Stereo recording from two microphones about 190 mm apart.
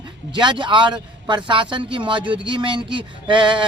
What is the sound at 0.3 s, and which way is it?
Speech, 25° right (ahead or behind).